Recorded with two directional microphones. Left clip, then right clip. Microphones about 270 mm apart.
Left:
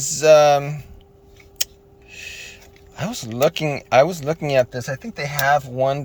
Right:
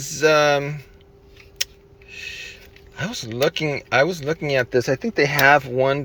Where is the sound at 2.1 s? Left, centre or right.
Centre.